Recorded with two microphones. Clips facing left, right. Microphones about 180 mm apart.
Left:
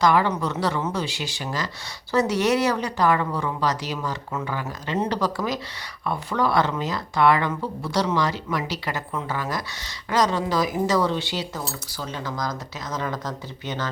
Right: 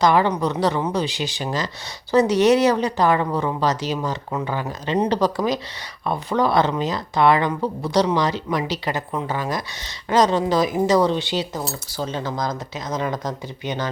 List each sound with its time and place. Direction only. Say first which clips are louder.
0.0 s speech: right 3 dB; 20° right (ahead or behind)